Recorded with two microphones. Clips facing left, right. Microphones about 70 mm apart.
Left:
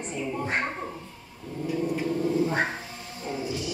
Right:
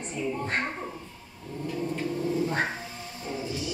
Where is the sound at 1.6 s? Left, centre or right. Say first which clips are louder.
Left 3 dB; centre.